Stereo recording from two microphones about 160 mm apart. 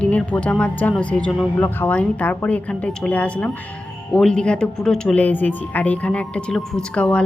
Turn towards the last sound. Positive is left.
turn(degrees=5)  # may be behind; listen again after turning